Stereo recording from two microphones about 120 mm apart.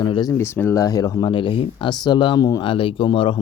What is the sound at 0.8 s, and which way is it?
Speech, 35° left (ahead or behind).